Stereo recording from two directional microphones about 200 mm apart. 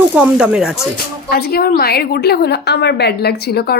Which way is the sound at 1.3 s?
50° left (ahead or behind).